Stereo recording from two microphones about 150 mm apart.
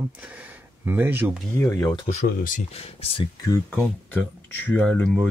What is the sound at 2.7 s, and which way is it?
Speech, 40° left (ahead or behind).